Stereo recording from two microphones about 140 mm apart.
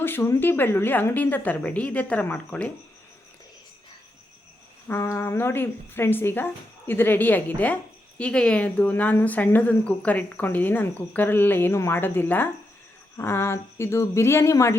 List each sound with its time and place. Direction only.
0.0 s speech: 15° left (ahead or behind)
4.9 s speech: 20° left (ahead or behind)